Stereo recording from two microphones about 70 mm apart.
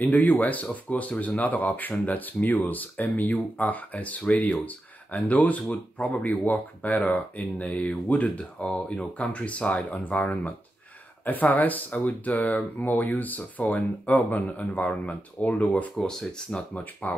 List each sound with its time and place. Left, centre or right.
0.0 s speech: left
16.0 s speech: centre
16.7 s speech: left